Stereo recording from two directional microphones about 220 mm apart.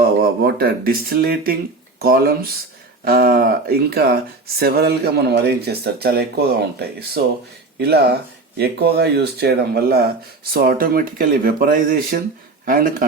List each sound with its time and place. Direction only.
0.2 s speech: 40° right (ahead or behind)